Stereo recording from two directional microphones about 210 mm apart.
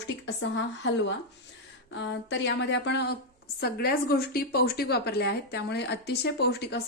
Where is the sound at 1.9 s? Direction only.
60° left (ahead or behind).